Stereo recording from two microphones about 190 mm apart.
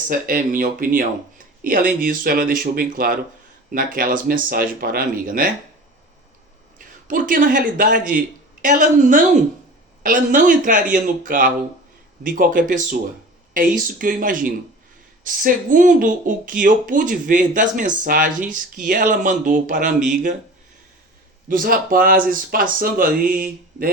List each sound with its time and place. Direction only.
0.1 s speech: 45° right (ahead or behind)
6.7 s a man's voice: 45° right (ahead or behind)
21.5 s speech: 50° right (ahead or behind)